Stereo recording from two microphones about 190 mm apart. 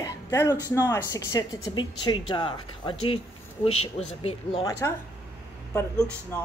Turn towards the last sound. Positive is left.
turn(degrees=10)  # may be behind; listen again after turning